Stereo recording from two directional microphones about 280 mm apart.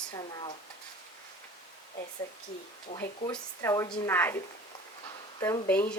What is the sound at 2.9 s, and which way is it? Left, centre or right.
Speech, left.